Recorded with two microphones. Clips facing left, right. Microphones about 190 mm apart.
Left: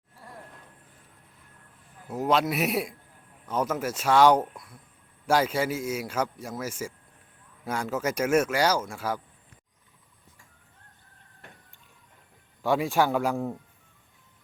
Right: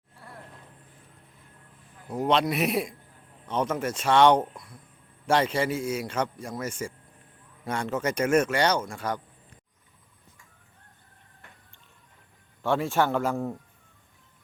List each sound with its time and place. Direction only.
2.0 s a man's voice: 5° left (ahead or behind)
12.6 s a man's voice: 15° left (ahead or behind)